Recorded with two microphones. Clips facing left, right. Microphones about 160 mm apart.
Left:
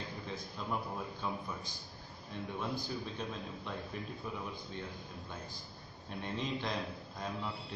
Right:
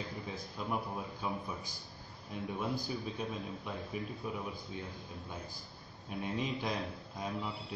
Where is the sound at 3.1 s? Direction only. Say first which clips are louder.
Right 2 dB; 15° right (ahead or behind).